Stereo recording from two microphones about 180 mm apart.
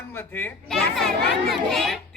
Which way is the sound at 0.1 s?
10° left (ahead or behind).